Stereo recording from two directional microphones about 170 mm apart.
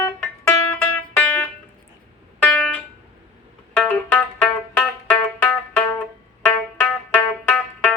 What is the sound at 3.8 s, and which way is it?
Music, 5° left (ahead or behind).